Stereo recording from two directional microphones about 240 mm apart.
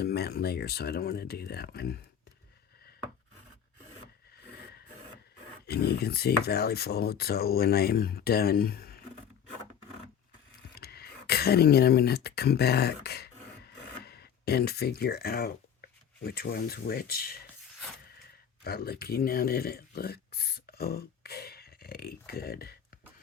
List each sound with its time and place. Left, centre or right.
0.0 s speech: left
5.6 s speech: left
10.8 s speech: left
18.6 s speech: left